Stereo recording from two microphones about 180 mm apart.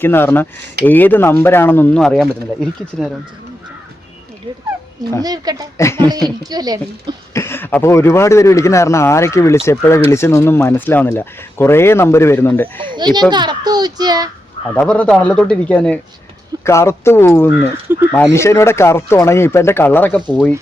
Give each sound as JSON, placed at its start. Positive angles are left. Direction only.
{"t": 0.0, "sound": "speech", "side_deg": 10}
{"t": 5.2, "sound": "speech", "side_deg": -20}
{"t": 5.7, "sound": "speech", "side_deg": 15}
{"t": 6.0, "sound": "speech", "side_deg": -20}
{"t": 7.3, "sound": "speech", "side_deg": 15}
{"t": 13.0, "sound": "speech", "side_deg": -25}
{"t": 14.8, "sound": "speech", "side_deg": 5}